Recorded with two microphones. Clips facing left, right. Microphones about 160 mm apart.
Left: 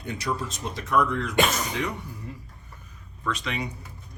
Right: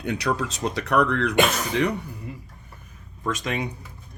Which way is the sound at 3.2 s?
45° right (ahead or behind).